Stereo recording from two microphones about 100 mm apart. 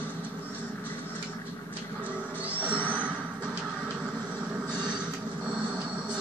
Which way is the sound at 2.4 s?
15° right (ahead or behind).